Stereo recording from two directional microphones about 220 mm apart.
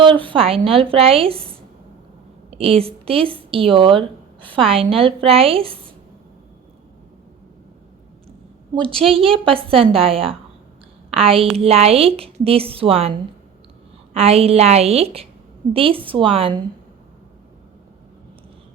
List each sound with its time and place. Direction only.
0.0 s speech: 25° right (ahead or behind)
2.5 s speech: 25° right (ahead or behind)
9.0 s a woman's voice: 25° right (ahead or behind)